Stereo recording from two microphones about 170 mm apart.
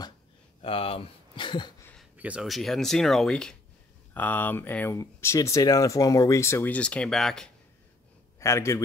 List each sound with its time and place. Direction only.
0.6 s speech: 35° left (ahead or behind)
2.1 s speech: 5° right (ahead or behind)
8.4 s a man's voice: 15° left (ahead or behind)